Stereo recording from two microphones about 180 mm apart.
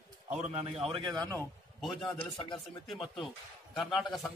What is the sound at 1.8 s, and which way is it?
A man's voice, 10° left (ahead or behind).